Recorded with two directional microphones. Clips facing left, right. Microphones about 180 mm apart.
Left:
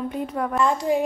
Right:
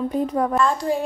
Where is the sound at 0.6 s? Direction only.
15° left (ahead or behind).